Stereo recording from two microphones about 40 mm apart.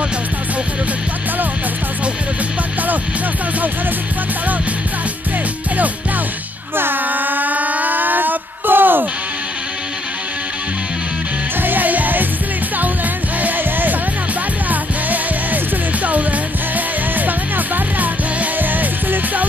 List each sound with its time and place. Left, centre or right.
6.8 s a sound: right
11.6 s music: right
13.4 s music: right
17.9 s music: right